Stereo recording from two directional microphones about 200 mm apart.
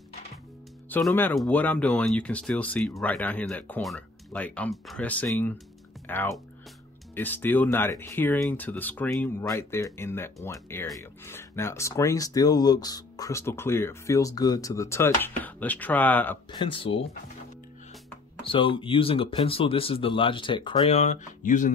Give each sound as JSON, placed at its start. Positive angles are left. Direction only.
{"t": 0.8, "sound": "speech", "side_deg": 10}
{"t": 16.5, "sound": "speech", "side_deg": 25}
{"t": 18.4, "sound": "speech", "side_deg": 25}